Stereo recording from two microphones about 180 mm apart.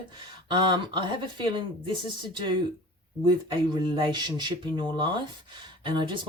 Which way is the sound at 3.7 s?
25° right (ahead or behind).